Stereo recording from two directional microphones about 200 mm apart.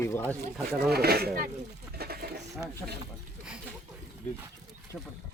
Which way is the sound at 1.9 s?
50° right (ahead or behind).